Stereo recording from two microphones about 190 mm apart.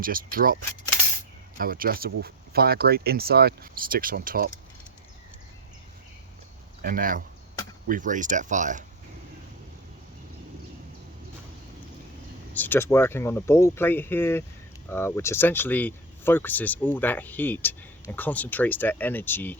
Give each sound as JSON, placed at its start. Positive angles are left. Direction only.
{"t": 0.0, "sound": "speech", "side_deg": -50}
{"t": 1.5, "sound": "speech", "side_deg": -50}
{"t": 6.8, "sound": "speech", "side_deg": -45}
{"t": 12.5, "sound": "speech", "side_deg": 10}